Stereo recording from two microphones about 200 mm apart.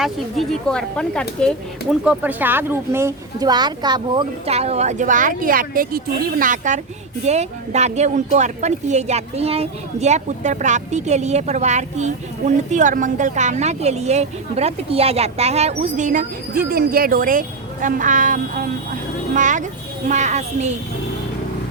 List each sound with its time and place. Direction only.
0.0 s speech: centre (ahead or behind)
1.9 s a woman's voice: 5° right (ahead or behind); by 20.7 s 35° right (ahead or behind)